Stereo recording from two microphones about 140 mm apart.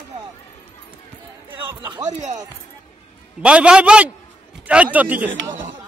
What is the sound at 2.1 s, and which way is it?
Speech, 60° right (ahead or behind).